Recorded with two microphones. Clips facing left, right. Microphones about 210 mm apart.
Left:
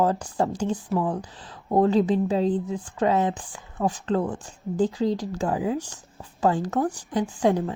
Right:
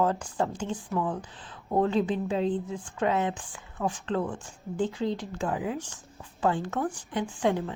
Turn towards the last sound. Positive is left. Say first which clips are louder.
# left 5 dB
turn(degrees=40)  # may be behind; listen again after turning